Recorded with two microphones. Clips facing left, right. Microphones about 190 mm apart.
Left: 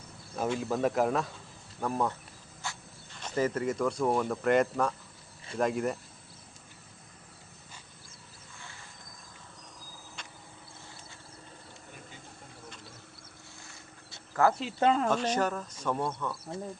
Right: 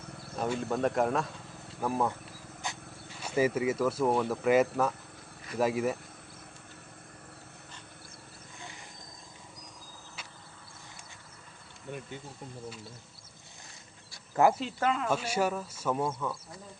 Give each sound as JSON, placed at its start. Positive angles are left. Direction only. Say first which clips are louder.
{"t": 0.5, "sound": "speech", "louder": "even", "side_deg": 0}
{"t": 2.6, "sound": "a sound", "louder": "right 1 dB", "side_deg": -15}
{"t": 3.2, "sound": "speech", "louder": "right 2 dB", "side_deg": -10}
{"t": 14.4, "sound": "speech", "louder": "right 2 dB", "side_deg": -20}
{"t": 14.8, "sound": "speech", "louder": "left 4 dB", "side_deg": 30}
{"t": 15.1, "sound": "speech", "louder": "left 1 dB", "side_deg": -10}
{"t": 16.5, "sound": "speech", "louder": "left 10 dB", "side_deg": 25}